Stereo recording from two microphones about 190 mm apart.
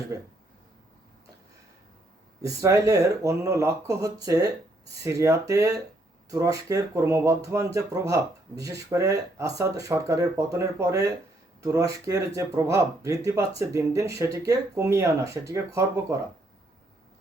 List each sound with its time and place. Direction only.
2.4 s speech: 15° right (ahead or behind)